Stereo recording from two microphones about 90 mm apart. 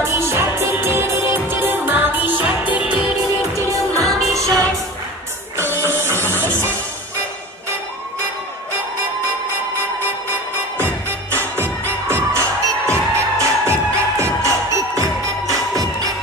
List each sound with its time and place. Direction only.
0.0 s music: 30° right (ahead or behind); by 3.1 s 15° right (ahead or behind)
4.0 s music: centre (ahead or behind)
5.6 s music: 30° right (ahead or behind)
10.8 s music: 25° right (ahead or behind)